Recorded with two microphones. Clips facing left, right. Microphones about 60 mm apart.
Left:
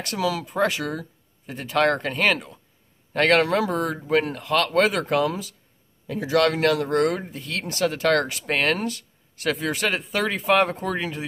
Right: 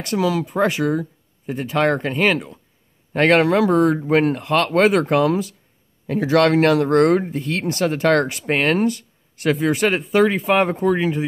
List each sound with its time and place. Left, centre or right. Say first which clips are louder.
0.0 s speech: right 5 dB; centre
3.1 s speech: right 4 dB; right
6.0 s speech: right 5 dB; right
6.4 s speech: right 6 dB; right; by 11.2 s centre